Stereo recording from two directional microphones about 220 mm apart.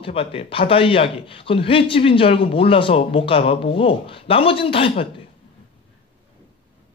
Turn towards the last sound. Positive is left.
turn(degrees=25)  # may be behind; listen again after turning